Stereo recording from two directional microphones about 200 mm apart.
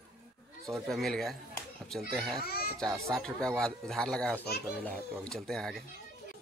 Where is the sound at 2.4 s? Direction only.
50° left (ahead or behind).